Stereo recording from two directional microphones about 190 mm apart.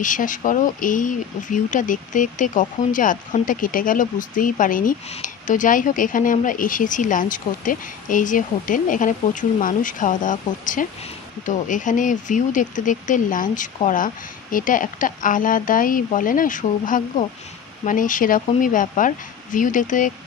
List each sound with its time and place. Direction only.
0.0 s speech: 45° left (ahead or behind)